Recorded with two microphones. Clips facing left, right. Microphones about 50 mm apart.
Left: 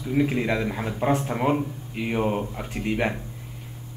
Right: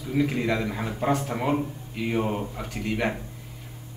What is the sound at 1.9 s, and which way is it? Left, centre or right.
A man's voice, left.